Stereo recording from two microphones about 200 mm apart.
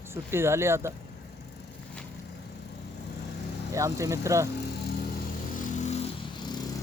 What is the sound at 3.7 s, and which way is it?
Speech, 15° right (ahead or behind).